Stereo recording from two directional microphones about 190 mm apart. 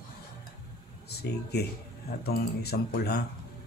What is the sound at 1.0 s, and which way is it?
Speech, 60° left (ahead or behind).